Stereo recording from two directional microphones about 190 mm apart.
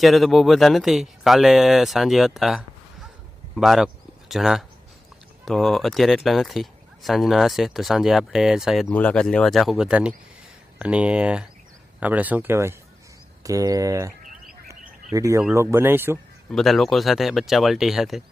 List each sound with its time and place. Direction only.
0.0 s speech: centre (ahead or behind); by 14.1 s 15° right (ahead or behind)
15.1 s speech: 15° right (ahead or behind)
16.5 s speech: centre (ahead or behind)